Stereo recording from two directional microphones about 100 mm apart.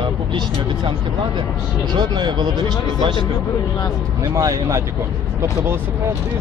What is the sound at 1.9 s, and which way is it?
Speech, 45° right (ahead or behind).